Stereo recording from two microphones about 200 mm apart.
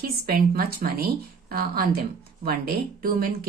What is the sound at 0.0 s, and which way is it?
A woman's voice, 50° right (ahead or behind).